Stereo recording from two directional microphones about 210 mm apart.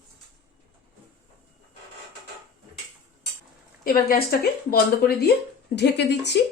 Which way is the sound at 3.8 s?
45° left (ahead or behind).